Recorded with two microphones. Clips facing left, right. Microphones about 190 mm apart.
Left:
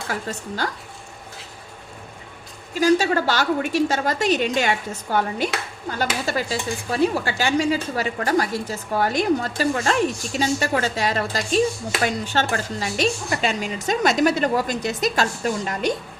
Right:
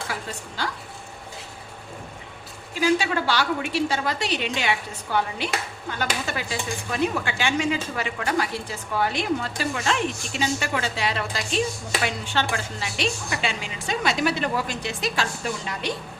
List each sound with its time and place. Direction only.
0.1 s a woman's voice: 45° left (ahead or behind)
2.8 s a woman's voice: 45° left (ahead or behind)